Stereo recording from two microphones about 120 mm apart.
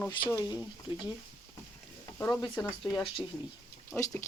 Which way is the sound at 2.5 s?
5° left (ahead or behind).